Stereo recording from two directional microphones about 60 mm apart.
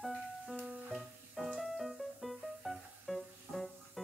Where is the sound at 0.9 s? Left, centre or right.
Centre.